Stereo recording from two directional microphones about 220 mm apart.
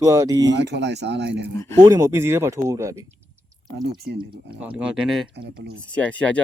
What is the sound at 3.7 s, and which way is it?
Speech, 45° right (ahead or behind).